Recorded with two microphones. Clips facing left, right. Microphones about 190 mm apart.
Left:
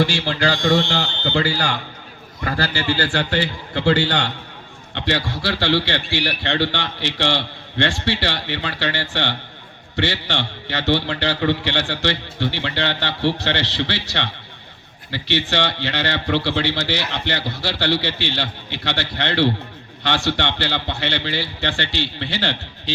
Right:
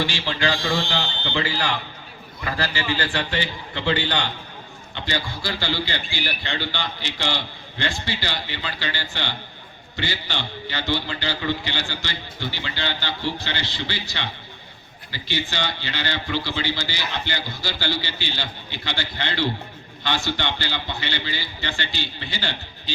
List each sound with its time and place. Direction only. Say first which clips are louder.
0.0 s a man's voice: left 5 dB; 70° left (ahead or behind)
0.6 s speech: left 6 dB; 45° left (ahead or behind)
1.4 s a man's voice: left 3 dB; 70° left (ahead or behind)